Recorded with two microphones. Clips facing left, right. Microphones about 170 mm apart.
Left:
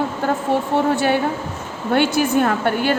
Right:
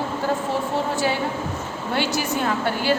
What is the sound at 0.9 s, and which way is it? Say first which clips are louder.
Speech: left 5 dB; 60° left (ahead or behind).